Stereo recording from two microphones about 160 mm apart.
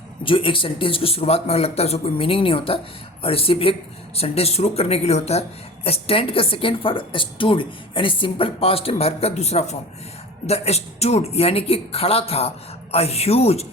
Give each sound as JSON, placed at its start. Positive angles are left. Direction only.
{"t": 0.3, "sound": "speech", "side_deg": 35}